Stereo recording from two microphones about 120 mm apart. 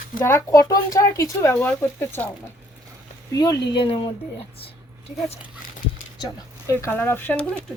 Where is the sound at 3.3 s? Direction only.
30° left (ahead or behind).